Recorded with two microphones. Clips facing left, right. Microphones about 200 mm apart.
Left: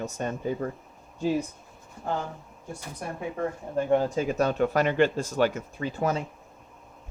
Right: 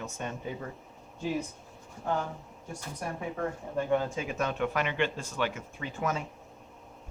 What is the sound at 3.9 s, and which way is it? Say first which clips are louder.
Speech: left 6 dB; 35° left (ahead or behind).